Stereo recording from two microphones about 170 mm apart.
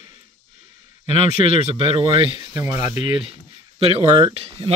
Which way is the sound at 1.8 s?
30° right (ahead or behind).